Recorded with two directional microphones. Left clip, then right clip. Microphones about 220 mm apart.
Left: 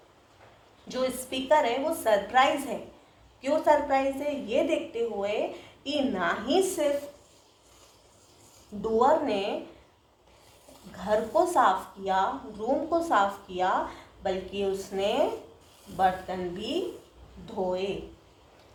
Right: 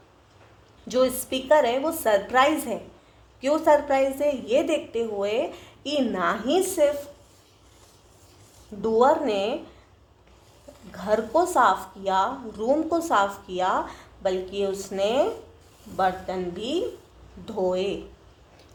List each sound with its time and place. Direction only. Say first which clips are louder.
0.9 s a woman's voice: right 7 dB; 45° right (ahead or behind)
8.8 s a woman's voice: right 3 dB; 45° right (ahead or behind)
10.9 s a woman's voice: right 3 dB; 40° right (ahead or behind)
13.8 s a woman's voice: even; centre (ahead or behind)
14.3 s a woman's voice: right 4 dB; 45° right (ahead or behind)